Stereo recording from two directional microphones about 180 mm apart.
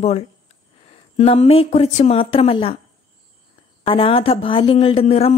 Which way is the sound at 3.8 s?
30° left (ahead or behind).